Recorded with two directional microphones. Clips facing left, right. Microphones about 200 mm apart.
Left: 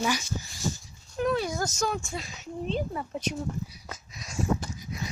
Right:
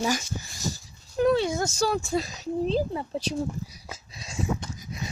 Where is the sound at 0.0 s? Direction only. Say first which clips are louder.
Right 2 dB; 40° right (ahead or behind).